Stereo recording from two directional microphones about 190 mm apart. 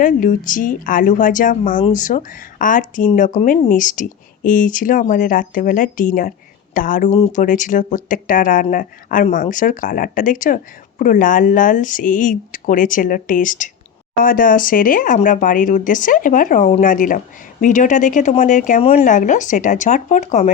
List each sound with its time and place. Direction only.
0.0 s speech: 45° left (ahead or behind)